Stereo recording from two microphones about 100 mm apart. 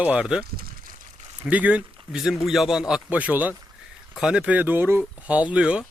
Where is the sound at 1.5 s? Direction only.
15° right (ahead or behind).